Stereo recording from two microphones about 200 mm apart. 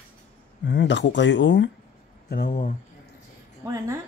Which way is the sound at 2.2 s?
45° left (ahead or behind).